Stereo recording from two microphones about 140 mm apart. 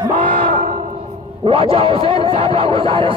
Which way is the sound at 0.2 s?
80° right.